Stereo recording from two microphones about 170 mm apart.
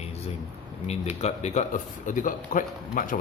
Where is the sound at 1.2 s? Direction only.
40° left (ahead or behind).